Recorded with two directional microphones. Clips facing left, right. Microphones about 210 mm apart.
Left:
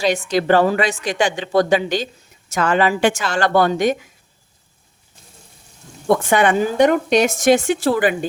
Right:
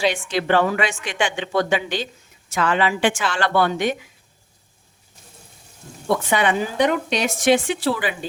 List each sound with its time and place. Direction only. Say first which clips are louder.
0.3 s a woman's voice: left 6 dB; 40° left (ahead or behind)
6.1 s a woman's voice: left 4 dB; 50° left (ahead or behind)